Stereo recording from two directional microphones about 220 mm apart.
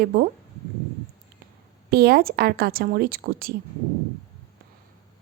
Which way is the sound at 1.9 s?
45° right (ahead or behind).